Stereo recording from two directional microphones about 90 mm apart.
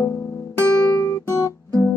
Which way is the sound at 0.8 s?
30° left (ahead or behind).